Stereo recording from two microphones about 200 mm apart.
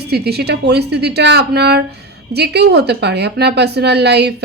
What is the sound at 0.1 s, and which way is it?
A woman's voice, 55° right (ahead or behind).